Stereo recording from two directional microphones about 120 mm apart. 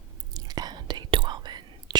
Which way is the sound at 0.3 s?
35° right (ahead or behind).